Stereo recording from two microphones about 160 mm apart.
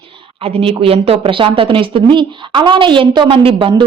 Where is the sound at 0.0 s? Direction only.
30° right (ahead or behind).